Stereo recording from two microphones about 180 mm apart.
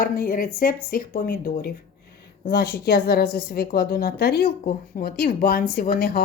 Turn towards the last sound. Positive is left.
turn(degrees=55)  # may be behind; listen again after turning